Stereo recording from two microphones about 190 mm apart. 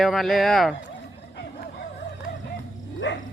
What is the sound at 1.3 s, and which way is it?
Hubbub, 55° left (ahead or behind).